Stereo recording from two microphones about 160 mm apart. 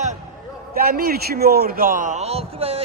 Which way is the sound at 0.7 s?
70° right (ahead or behind).